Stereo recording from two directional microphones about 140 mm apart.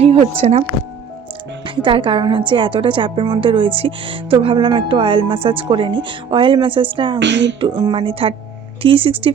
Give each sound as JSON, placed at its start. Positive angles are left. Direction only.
{"t": 0.0, "sound": "speech", "side_deg": -45}
{"t": 1.6, "sound": "a woman's voice", "side_deg": -35}